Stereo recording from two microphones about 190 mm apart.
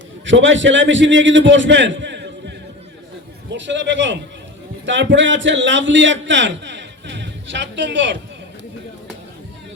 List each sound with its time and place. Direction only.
0.3 s a man's voice: 75° right (ahead or behind)
3.5 s a man's voice: 70° right (ahead or behind)